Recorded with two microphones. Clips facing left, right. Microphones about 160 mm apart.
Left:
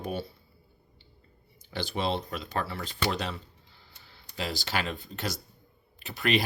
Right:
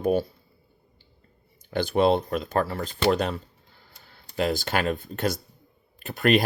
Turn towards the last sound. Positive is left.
turn(degrees=-50)  # may be behind; listen again after turning